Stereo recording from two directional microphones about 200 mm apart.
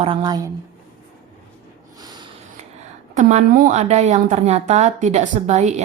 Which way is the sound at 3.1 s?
40° right (ahead or behind).